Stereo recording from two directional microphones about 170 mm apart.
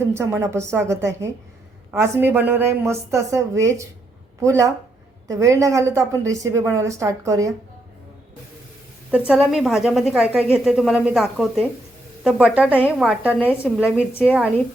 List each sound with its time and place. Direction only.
0.0 s a woman's voice: 15° right (ahead or behind)
9.0 s a woman's voice: 5° right (ahead or behind)